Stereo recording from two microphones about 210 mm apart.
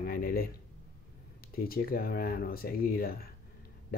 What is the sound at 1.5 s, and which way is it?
Speech, 45° left (ahead or behind).